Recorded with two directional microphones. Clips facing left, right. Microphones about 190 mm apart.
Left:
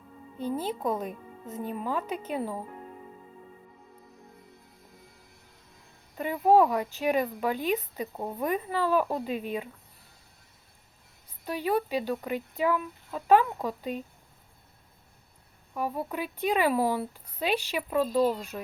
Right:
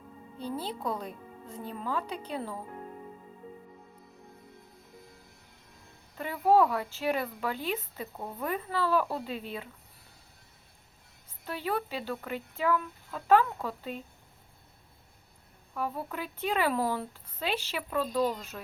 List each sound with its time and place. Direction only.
0.3 s speech: 15° left (ahead or behind)
6.1 s speech: 15° left (ahead or behind)
11.4 s speech: 15° left (ahead or behind)
15.7 s speech: 15° left (ahead or behind)